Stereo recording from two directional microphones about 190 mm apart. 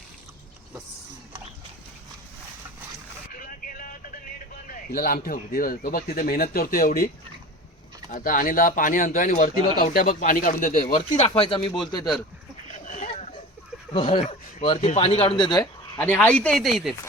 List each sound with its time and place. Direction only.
3.3 s vehicle: 50° left (ahead or behind)
4.7 s speech: 50° left (ahead or behind)
8.1 s speech: 45° left (ahead or behind)
11.2 s speech: 30° left (ahead or behind)
12.6 s a sound: 40° left (ahead or behind)
13.9 s speech: 25° left (ahead or behind)
16.0 s speech: 10° left (ahead or behind)